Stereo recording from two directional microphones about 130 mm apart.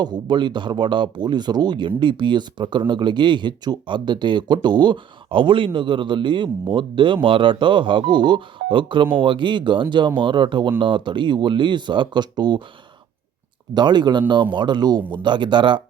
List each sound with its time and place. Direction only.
0.0 s speech: 35° right (ahead or behind)
13.7 s speech: 35° right (ahead or behind)